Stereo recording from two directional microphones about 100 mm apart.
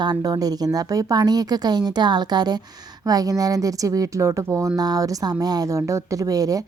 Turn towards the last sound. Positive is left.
turn(degrees=-35)  # may be behind; listen again after turning